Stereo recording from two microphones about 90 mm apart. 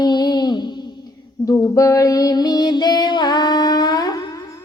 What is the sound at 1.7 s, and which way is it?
Music, 40° left (ahead or behind).